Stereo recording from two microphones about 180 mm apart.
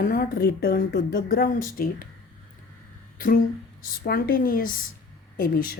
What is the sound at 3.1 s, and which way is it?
A woman's voice, 50° left (ahead or behind).